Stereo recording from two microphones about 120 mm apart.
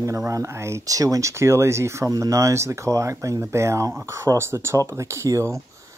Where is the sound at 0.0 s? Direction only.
25° right (ahead or behind).